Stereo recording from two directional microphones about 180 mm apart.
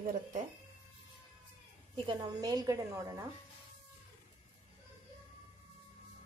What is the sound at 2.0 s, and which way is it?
A woman's voice, 20° right (ahead or behind).